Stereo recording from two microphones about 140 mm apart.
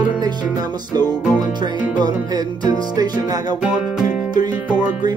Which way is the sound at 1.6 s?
30° right (ahead or behind).